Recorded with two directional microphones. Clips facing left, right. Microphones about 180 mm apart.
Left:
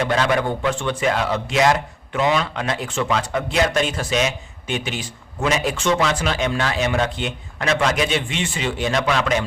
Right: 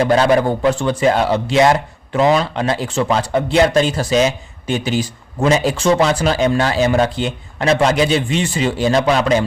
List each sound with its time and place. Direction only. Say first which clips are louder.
0.0 s a man's voice: right 6 dB; 35° right (ahead or behind)